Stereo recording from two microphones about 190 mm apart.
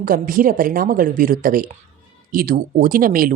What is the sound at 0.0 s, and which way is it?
Speech, 45° right (ahead or behind).